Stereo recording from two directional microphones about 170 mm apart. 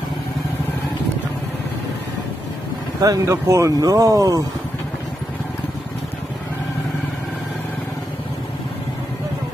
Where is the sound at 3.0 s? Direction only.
20° right (ahead or behind).